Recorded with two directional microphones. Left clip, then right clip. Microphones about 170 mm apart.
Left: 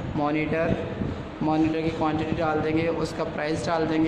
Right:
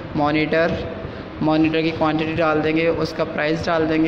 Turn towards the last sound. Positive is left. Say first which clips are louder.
# right 6 dB
turn(degrees=-10)  # may be behind; listen again after turning